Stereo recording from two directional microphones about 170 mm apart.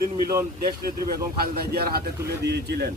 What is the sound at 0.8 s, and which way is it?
Speech, 65° right (ahead or behind).